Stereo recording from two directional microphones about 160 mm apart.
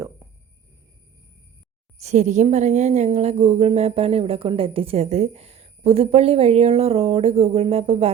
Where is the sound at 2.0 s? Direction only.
45° right (ahead or behind).